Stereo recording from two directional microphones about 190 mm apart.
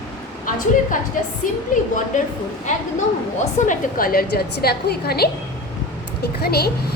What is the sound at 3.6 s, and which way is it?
A woman's voice, 50° left (ahead or behind).